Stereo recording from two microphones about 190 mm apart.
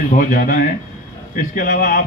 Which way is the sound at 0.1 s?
45° left (ahead or behind).